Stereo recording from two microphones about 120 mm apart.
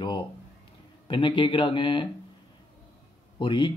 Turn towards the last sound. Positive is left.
turn(degrees=40)  # may be behind; listen again after turning